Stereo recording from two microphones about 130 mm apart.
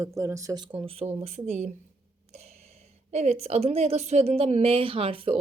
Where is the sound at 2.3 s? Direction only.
55° right (ahead or behind).